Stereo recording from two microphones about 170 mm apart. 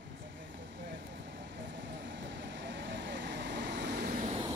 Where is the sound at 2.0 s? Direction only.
90° right; by 4.3 s 60° right (ahead or behind).